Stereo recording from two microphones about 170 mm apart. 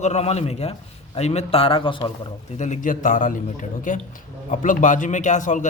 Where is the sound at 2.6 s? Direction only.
50° left (ahead or behind).